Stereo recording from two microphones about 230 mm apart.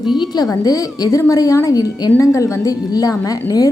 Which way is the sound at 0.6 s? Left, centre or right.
Centre.